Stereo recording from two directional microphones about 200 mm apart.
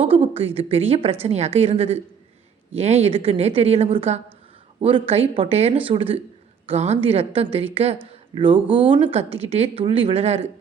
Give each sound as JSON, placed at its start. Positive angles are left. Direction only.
{"t": 0.0, "sound": "a woman's voice", "side_deg": -30}
{"t": 8.1, "sound": "a sound", "side_deg": -25}
{"t": 8.9, "sound": "a woman's voice", "side_deg": -30}